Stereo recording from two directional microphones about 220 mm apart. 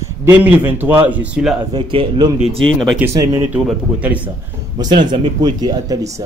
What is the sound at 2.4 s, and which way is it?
Speech, centre (ahead or behind).